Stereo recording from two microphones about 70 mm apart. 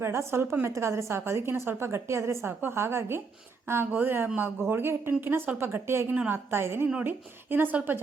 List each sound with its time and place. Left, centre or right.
0.0 s a woman's voice: right
6.1 s a woman's voice: right